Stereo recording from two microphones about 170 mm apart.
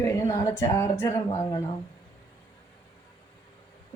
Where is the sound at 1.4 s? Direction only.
25° left (ahead or behind).